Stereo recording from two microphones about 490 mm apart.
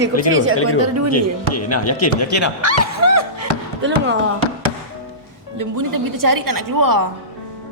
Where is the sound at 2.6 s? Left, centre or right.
Right.